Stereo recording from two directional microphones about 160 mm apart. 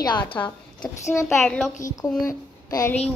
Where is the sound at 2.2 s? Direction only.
20° left (ahead or behind).